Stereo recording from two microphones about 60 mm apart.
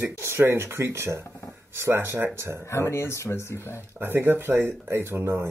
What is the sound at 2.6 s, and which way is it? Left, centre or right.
Speech, left.